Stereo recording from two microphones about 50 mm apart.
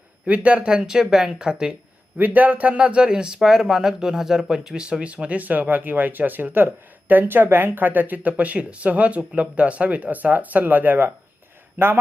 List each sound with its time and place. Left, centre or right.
0.3 s speech: right
2.1 s a man's voice: right